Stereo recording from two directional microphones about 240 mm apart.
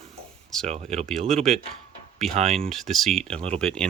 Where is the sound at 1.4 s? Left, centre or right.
Centre.